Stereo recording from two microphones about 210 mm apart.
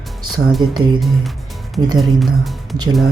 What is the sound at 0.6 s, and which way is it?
Speech, 20° right (ahead or behind).